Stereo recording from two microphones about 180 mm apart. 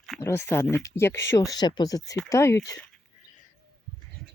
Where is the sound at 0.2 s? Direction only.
15° left (ahead or behind).